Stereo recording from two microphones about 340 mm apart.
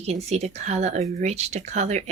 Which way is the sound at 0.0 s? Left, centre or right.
Centre.